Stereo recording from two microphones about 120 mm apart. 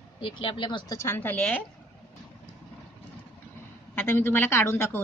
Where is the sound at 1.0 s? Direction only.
20° left (ahead or behind).